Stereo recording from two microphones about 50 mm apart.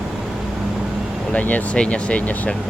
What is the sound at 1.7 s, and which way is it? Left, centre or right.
Speech, left.